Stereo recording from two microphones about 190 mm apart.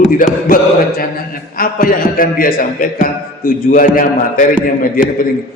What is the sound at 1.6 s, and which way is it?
A man's voice, 50° left (ahead or behind).